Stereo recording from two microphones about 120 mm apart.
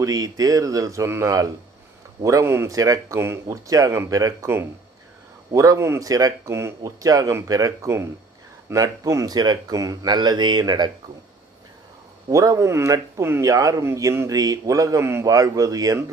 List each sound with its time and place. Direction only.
0.0 s speech: 30° right (ahead or behind)
12.3 s speech: 30° right (ahead or behind)